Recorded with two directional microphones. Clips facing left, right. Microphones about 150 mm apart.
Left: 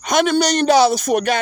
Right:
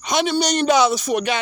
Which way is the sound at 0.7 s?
35° left (ahead or behind).